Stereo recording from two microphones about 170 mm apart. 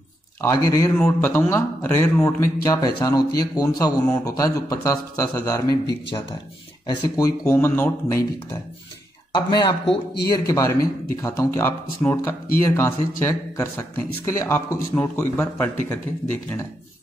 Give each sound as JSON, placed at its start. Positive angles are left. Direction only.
{"t": 0.4, "sound": "speech", "side_deg": 20}
{"t": 9.5, "sound": "speech", "side_deg": 25}